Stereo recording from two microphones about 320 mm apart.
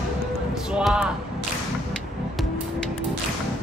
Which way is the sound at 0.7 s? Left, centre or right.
Centre.